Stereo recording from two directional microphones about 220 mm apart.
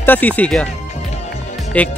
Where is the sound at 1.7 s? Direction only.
5° left (ahead or behind).